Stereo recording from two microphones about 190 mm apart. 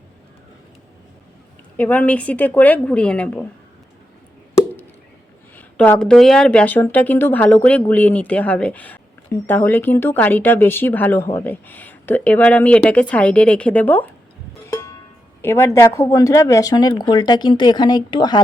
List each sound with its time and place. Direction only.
1.7 s speech: 10° left (ahead or behind)
4.5 s plop: 10° left (ahead or behind)
5.5 s speech: 10° left (ahead or behind)
14.7 s music: 15° left (ahead or behind)
15.4 s speech: 15° left (ahead or behind)